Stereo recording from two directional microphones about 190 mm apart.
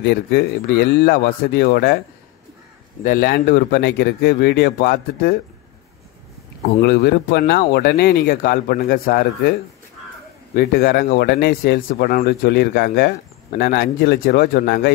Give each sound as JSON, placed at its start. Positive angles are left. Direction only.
{"t": 0.0, "sound": "speech", "side_deg": 60}
{"t": 3.0, "sound": "speech", "side_deg": 50}
{"t": 6.8, "sound": "speech", "side_deg": 55}